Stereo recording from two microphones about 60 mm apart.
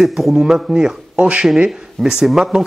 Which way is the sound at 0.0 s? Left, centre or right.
Centre.